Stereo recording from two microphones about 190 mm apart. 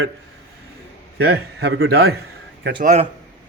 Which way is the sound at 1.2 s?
60° right (ahead or behind).